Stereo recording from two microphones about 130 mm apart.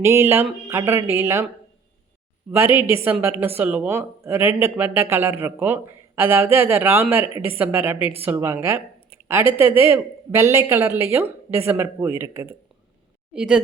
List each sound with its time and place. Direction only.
0.0 s speech: 20° right (ahead or behind)
2.5 s a man's voice: 15° right (ahead or behind)
13.3 s speech: 5° right (ahead or behind)